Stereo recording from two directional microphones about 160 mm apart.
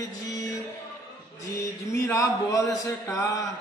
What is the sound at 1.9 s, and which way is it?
A man's voice, 20° left (ahead or behind).